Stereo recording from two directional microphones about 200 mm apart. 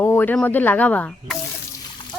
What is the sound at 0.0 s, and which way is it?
Speech, 10° left (ahead or behind).